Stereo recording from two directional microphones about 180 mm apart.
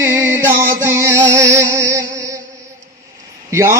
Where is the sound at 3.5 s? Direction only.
15° right (ahead or behind).